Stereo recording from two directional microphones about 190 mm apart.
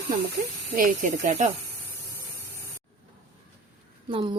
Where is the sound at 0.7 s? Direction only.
45° right (ahead or behind).